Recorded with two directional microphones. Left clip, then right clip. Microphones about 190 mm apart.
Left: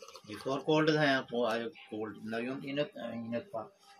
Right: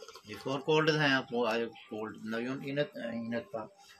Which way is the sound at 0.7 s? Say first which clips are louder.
Right 1 dB; 35° right (ahead or behind).